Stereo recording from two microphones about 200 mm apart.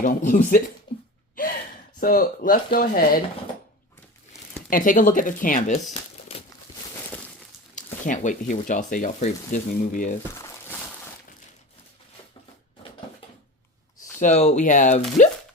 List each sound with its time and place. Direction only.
0.0 s speech: 45° left (ahead or behind)
2.0 s speech: 45° left (ahead or behind)
4.7 s speech: 40° left (ahead or behind)
7.8 s speech: 40° left (ahead or behind)
10.3 s crumpling: 15° left (ahead or behind)
14.2 s speech: 35° left (ahead or behind)